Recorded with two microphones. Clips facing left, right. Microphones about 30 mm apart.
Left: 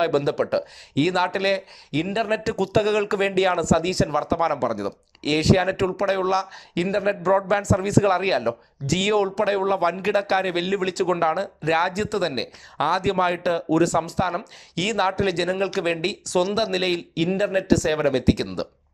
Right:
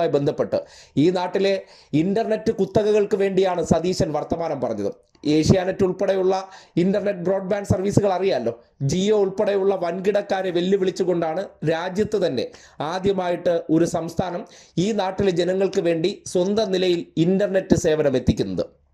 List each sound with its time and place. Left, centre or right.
0.0 s speech: left
2.4 s speech: left
7.2 s a man's voice: left
7.8 s speech: left
9.4 s speech: left
10.8 s speech: left
11.2 s speech: left
12.4 s speech: left
13.0 s speech: left
13.3 s speech: left
13.7 s speech: left
14.9 s speech: left
17.2 s speech: left